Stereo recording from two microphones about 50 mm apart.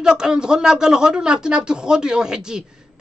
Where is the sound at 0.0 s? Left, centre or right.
Centre.